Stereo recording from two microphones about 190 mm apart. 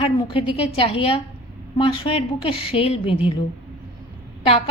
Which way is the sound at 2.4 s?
30° left (ahead or behind).